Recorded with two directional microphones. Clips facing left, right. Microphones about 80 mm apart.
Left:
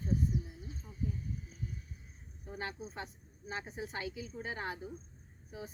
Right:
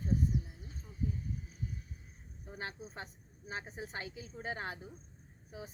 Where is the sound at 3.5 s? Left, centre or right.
Right.